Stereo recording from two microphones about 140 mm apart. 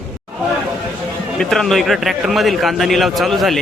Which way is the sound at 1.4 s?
5° left (ahead or behind).